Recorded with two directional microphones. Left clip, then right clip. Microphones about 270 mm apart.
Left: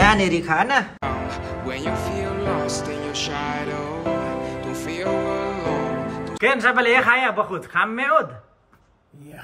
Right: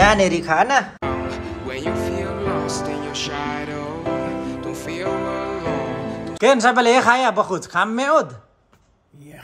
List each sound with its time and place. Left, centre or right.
0.0 s speech: centre
1.0 s music: centre
6.4 s speech: centre